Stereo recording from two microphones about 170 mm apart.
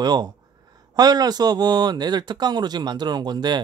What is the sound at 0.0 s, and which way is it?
Speech, 25° right (ahead or behind).